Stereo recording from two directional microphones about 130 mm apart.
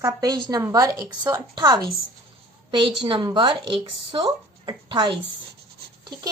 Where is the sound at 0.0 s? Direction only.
30° right (ahead or behind).